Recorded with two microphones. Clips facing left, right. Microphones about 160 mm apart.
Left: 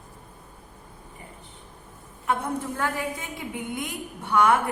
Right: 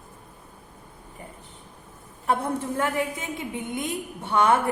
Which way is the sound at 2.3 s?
25° right (ahead or behind).